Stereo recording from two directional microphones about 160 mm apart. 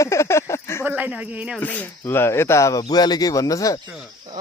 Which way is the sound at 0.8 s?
10° right (ahead or behind).